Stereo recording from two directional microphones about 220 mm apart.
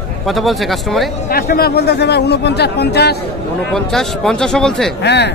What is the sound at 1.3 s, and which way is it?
Speech, 45° left (ahead or behind).